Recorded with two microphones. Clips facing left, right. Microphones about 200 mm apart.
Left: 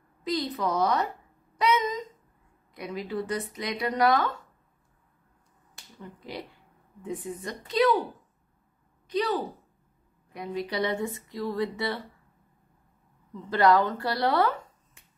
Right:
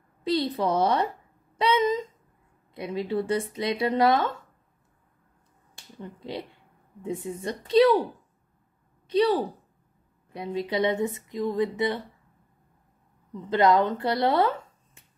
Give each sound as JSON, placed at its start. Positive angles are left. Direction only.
{"t": 0.2, "sound": "speech", "side_deg": -30}
{"t": 6.1, "sound": "speech", "side_deg": -25}
{"t": 9.1, "sound": "speech", "side_deg": -30}
{"t": 13.3, "sound": "speech", "side_deg": -20}